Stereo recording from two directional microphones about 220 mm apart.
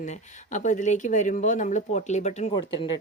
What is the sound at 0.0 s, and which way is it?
Speech, 30° left (ahead or behind).